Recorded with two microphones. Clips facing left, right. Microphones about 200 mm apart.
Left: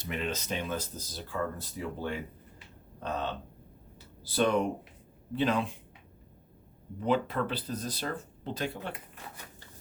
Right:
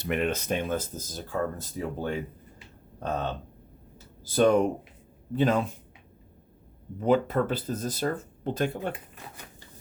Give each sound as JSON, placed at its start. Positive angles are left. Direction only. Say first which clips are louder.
{"t": 0.0, "sound": "speech", "louder": "right 7 dB", "side_deg": -60}
{"t": 4.2, "sound": "speech", "louder": "right 6 dB", "side_deg": -45}
{"t": 7.0, "sound": "speech", "louder": "right 5 dB", "side_deg": -45}